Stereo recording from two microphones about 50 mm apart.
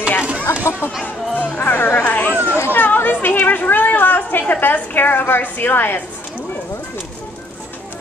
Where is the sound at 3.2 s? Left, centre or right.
Left.